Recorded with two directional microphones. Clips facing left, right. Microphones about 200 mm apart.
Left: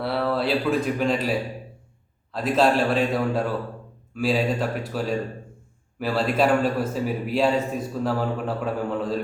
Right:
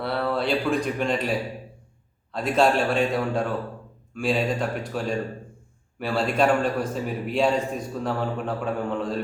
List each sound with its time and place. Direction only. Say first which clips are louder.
0.0 s speech: left 1 dB; centre (ahead or behind)
2.3 s a man's voice: left 1 dB; centre (ahead or behind)